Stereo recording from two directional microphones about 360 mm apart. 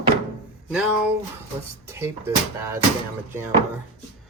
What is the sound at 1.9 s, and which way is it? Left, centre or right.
Speech, centre.